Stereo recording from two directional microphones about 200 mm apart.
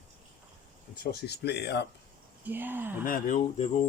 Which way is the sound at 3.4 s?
35° left (ahead or behind).